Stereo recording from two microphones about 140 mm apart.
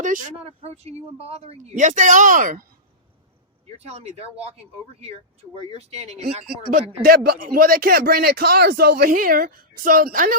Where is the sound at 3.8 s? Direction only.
50° right (ahead or behind).